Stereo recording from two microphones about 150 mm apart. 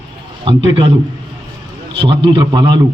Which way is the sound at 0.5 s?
35° right (ahead or behind).